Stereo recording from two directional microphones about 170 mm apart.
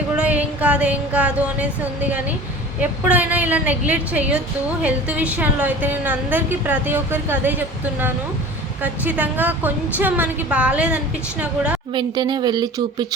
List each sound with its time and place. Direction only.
0.2 s a sound: 10° right (ahead or behind)
2.8 s a woman's voice: 10° right (ahead or behind)
8.8 s a woman's voice: 10° right (ahead or behind)
11.9 s speech: 25° right (ahead or behind)